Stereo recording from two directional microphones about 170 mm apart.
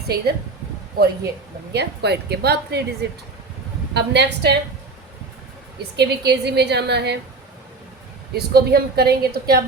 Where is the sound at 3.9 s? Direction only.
85° right.